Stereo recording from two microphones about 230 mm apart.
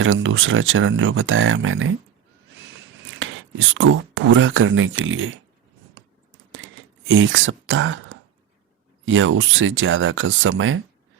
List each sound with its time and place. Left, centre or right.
0.0 s speech: right
3.2 s whispering: right
3.8 s speech: right
7.1 s speech: right